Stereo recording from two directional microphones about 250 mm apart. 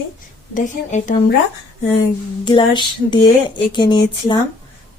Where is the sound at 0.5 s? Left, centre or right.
Left.